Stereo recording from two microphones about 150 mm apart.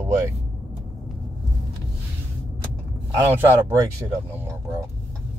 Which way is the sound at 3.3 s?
15° right (ahead or behind).